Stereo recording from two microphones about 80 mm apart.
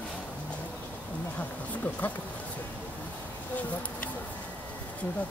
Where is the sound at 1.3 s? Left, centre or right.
Left.